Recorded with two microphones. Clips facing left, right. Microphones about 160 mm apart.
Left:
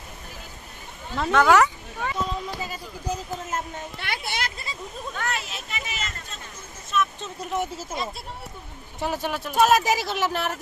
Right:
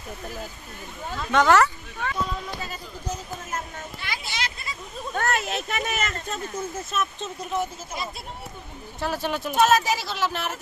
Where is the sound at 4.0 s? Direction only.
60° left (ahead or behind).